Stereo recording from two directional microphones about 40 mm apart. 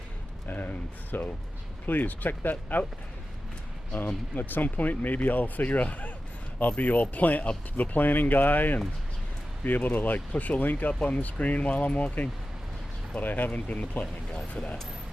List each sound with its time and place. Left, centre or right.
0.4 s speech: left
4.0 s speech: left
13.1 s speech: left
13.5 s speech: left